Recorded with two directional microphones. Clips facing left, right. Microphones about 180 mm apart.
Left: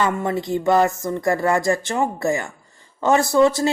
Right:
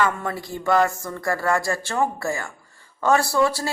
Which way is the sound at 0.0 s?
20° left (ahead or behind).